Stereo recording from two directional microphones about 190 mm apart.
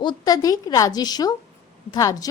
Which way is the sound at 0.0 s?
20° left (ahead or behind).